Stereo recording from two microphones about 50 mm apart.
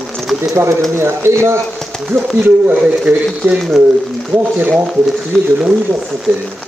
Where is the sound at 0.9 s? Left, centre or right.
Right.